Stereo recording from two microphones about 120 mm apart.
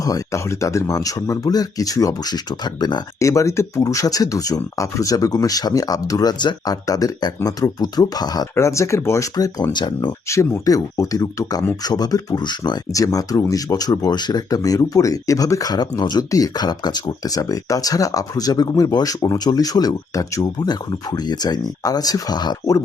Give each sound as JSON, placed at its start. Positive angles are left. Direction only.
{"t": 0.0, "sound": "speech", "side_deg": 30}
{"t": 3.2, "sound": "speech", "side_deg": 25}
{"t": 10.2, "sound": "speech", "side_deg": 25}